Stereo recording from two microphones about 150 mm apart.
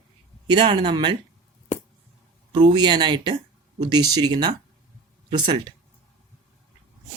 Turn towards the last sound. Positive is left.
turn(degrees=-35)  # may be behind; listen again after turning